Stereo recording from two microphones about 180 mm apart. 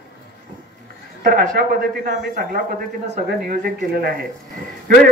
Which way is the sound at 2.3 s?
55° right (ahead or behind).